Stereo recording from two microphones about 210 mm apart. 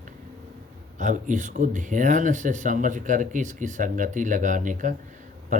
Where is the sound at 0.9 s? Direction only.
35° right (ahead or behind).